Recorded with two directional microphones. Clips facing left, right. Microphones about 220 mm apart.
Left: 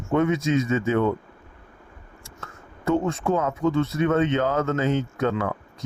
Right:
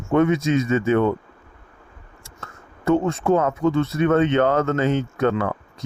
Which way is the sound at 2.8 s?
65° right (ahead or behind).